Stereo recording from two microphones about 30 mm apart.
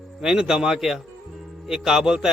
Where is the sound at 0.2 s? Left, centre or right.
Centre.